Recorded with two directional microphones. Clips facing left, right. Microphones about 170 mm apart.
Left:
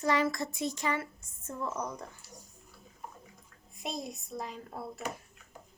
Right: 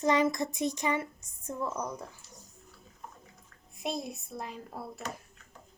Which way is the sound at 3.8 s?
Centre (ahead or behind).